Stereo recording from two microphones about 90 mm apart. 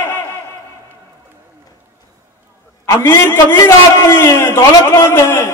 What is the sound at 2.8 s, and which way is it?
Mantra, 30° left (ahead or behind).